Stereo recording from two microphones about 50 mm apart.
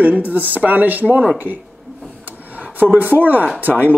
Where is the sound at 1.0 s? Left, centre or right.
Right.